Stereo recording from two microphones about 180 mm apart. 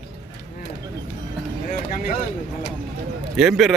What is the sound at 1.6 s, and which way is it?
Vehicle, 45° left (ahead or behind).